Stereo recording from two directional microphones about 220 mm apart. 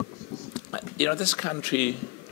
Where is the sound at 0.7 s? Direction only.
15° left (ahead or behind).